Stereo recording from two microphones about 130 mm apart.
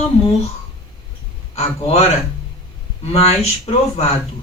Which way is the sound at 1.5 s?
50° left (ahead or behind).